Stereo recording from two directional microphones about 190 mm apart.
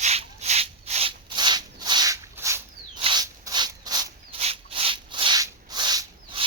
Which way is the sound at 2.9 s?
25° right (ahead or behind).